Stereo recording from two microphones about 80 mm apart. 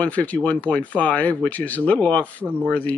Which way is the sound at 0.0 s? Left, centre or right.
Centre.